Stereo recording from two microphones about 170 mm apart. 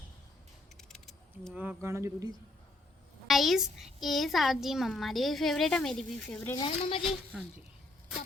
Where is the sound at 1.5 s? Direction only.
15° right (ahead or behind).